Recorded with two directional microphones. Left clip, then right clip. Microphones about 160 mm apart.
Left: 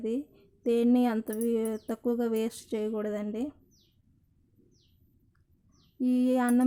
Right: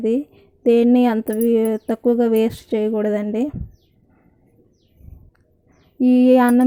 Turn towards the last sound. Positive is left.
turn(degrees=-30)  # may be behind; listen again after turning